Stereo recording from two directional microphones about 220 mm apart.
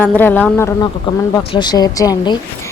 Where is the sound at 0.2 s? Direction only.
5° left (ahead or behind).